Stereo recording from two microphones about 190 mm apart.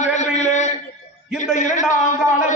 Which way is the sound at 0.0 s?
40° left (ahead or behind).